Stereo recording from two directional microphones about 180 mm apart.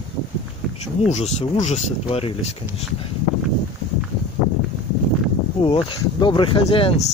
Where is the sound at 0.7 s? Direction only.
40° left (ahead or behind).